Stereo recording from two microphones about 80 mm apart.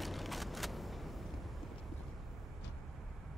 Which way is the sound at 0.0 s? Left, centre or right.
Centre.